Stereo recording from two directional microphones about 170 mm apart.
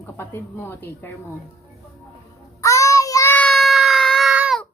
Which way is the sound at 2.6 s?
20° left (ahead or behind).